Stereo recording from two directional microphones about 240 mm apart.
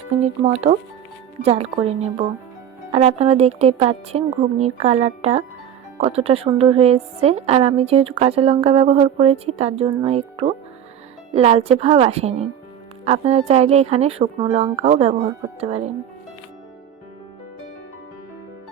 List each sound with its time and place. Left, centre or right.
0.2 s a woman's voice: right